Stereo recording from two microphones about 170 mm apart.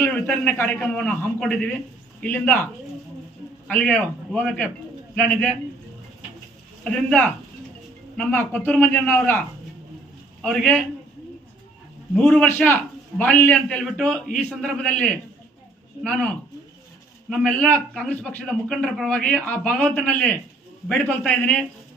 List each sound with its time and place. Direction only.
0.0 s a man's voice: 15° left (ahead or behind)
3.7 s a man's voice: 10° left (ahead or behind)
6.8 s a man's voice: 5° left (ahead or behind)
10.4 s a man's voice: 5° left (ahead or behind)
12.1 s a man's voice: 5° left (ahead or behind)